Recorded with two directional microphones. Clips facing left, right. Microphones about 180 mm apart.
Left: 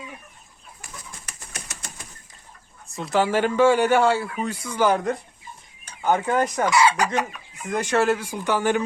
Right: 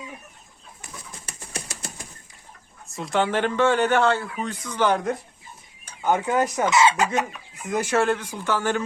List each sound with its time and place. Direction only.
0.8 s bird: 30° right (ahead or behind)
2.9 s a man's voice: centre (ahead or behind)
6.7 s chicken: 25° right (ahead or behind)
7.7 s speech: 5° right (ahead or behind)
8.0 s a man's voice: 10° left (ahead or behind)